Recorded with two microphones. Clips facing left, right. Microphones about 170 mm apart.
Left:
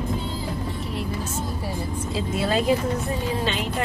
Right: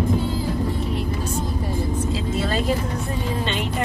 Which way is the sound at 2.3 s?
10° left (ahead or behind).